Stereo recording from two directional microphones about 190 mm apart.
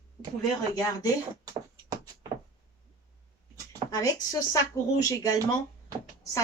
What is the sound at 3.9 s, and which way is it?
Speech, 20° left (ahead or behind).